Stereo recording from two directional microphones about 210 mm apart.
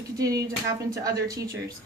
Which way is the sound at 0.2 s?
15° right (ahead or behind).